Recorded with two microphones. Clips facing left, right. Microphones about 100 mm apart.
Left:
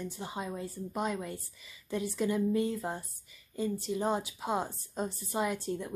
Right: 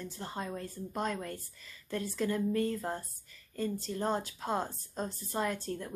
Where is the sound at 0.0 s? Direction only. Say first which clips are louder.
Left 1 dB; 10° left (ahead or behind).